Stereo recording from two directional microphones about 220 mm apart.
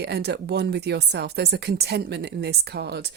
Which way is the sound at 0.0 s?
50° right (ahead or behind).